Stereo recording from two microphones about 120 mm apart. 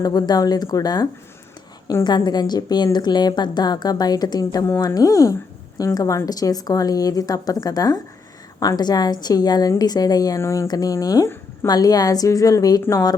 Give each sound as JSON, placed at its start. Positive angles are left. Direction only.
{"t": 0.0, "sound": "a woman's voice", "side_deg": 35}